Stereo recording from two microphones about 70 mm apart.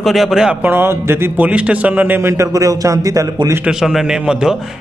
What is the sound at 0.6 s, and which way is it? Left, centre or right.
Speech, right.